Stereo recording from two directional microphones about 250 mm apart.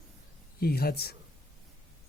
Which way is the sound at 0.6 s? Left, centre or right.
Left.